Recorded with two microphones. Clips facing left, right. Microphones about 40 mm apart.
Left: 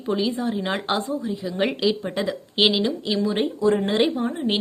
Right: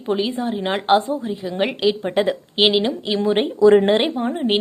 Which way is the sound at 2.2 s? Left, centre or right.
Right.